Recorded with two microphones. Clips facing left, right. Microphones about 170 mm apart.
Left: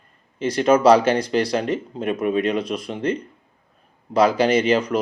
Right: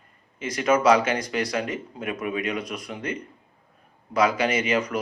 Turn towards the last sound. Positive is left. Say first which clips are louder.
# left 6 dB
turn(degrees=30)  # may be behind; listen again after turning